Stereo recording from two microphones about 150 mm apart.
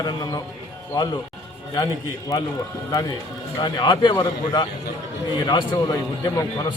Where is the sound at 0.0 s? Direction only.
25° left (ahead or behind).